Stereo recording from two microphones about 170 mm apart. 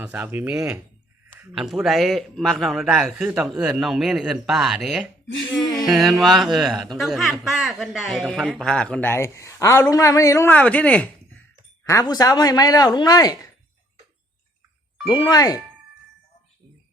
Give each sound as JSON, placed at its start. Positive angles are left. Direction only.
{"t": 0.0, "sound": "speech", "side_deg": -10}
{"t": 1.3, "sound": "a sound", "side_deg": -15}
{"t": 1.5, "sound": "speech", "side_deg": 0}
{"t": 11.9, "sound": "speech", "side_deg": 20}
{"t": 15.1, "sound": "speech", "side_deg": 20}